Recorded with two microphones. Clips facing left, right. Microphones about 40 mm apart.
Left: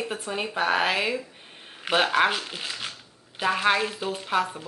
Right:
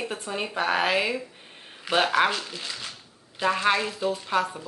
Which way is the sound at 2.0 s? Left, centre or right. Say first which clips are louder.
Even; centre.